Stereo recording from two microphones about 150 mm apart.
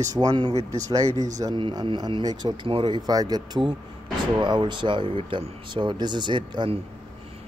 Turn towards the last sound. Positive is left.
turn(degrees=-30)  # may be behind; listen again after turning